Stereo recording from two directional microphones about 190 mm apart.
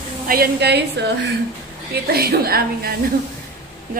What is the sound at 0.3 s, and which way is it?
A woman's voice, 55° right (ahead or behind).